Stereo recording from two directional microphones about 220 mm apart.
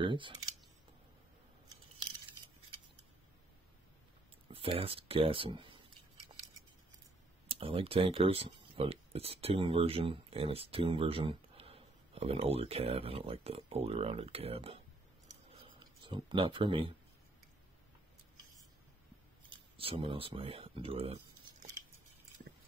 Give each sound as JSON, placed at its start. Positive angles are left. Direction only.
{"t": 0.0, "sound": "speech", "side_deg": -20}
{"t": 4.5, "sound": "speech", "side_deg": -25}
{"t": 7.4, "sound": "speech", "side_deg": -25}
{"t": 15.2, "sound": "a sound", "side_deg": -20}
{"t": 19.8, "sound": "speech", "side_deg": -25}